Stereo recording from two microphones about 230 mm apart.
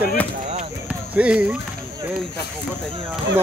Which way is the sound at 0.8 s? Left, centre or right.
Centre.